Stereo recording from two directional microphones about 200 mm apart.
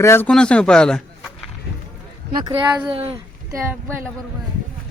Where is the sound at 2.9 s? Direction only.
30° right (ahead or behind).